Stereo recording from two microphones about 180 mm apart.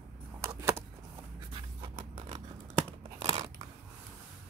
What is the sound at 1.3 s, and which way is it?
Writing, 30° right (ahead or behind).